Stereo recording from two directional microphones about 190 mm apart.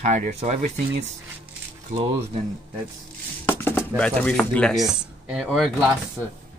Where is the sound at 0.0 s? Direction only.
40° right (ahead or behind).